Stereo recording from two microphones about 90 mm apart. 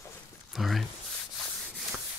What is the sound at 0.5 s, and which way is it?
Speech, centre (ahead or behind).